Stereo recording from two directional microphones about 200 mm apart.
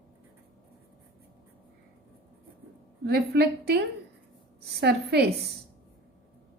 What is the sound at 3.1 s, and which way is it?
Speech, 55° right (ahead or behind).